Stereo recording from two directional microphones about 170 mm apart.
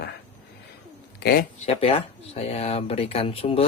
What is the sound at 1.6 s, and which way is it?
Speech, 35° left (ahead or behind).